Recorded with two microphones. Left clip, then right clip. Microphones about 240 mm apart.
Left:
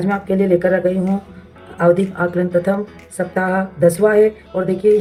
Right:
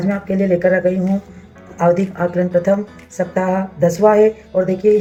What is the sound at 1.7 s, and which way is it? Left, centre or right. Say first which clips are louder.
A woman's voice: left 1 dB; left.